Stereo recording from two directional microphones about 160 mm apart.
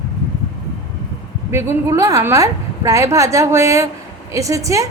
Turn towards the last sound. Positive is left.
turn(degrees=-20)  # may be behind; listen again after turning